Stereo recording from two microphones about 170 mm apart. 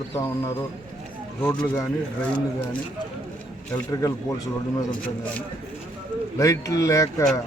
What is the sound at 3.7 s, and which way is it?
Speech, 20° left (ahead or behind).